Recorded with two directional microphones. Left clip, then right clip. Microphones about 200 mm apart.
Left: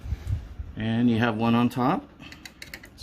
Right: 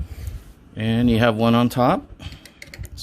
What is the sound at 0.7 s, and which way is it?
Speech, 50° right (ahead or behind).